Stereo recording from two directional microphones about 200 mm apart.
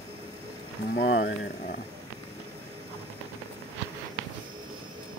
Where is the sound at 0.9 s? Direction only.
55° left (ahead or behind).